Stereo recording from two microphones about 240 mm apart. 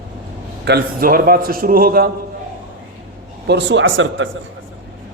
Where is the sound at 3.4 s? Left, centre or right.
Right.